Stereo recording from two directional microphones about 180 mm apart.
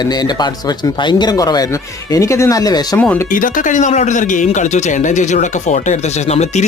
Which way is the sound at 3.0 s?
10° left (ahead or behind).